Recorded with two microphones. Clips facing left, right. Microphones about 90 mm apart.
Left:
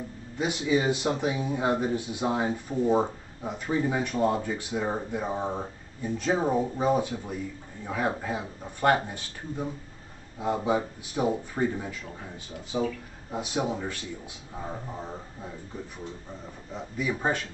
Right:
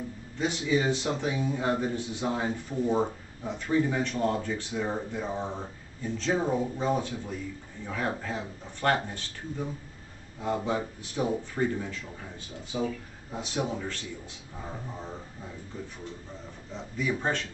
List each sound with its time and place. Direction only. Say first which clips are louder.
0.4 s speech: left 1 dB; 10° left (ahead or behind)
10.4 s speech: left 3 dB; 10° left (ahead or behind)
16.7 s speech: even; 5° left (ahead or behind)